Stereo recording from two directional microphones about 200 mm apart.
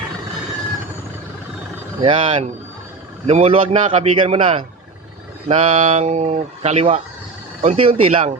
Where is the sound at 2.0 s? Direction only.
25° right (ahead or behind).